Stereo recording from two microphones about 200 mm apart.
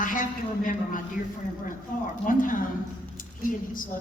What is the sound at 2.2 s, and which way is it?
Speech, 40° left (ahead or behind).